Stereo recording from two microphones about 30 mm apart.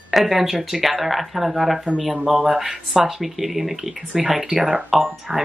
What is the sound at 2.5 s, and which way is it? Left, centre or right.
A woman's voice, centre.